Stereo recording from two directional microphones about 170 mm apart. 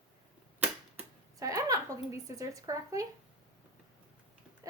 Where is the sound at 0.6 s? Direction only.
15° right (ahead or behind).